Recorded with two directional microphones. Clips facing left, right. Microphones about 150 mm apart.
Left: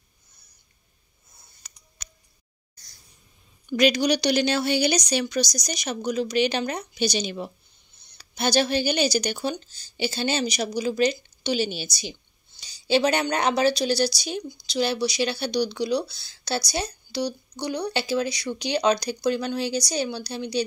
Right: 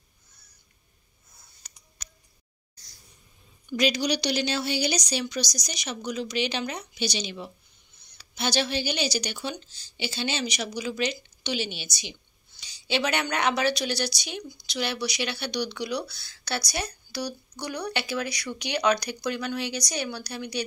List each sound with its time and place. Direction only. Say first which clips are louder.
3.7 s a woman's voice: left 5 dB; 55° left (ahead or behind); by 20.6 s 30° left (ahead or behind)